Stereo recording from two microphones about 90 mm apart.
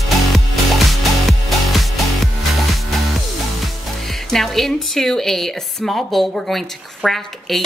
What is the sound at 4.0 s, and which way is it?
Speech, 5° left (ahead or behind).